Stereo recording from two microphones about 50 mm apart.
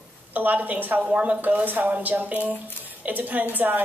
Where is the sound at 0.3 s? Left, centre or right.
Right.